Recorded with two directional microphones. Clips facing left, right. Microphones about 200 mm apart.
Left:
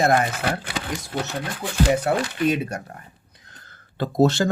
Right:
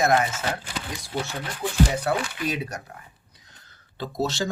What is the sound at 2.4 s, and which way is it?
Speech, 25° left (ahead or behind).